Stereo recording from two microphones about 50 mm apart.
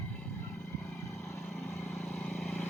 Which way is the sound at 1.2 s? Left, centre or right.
Centre.